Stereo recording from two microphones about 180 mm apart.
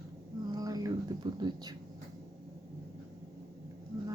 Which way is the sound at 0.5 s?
20° right (ahead or behind).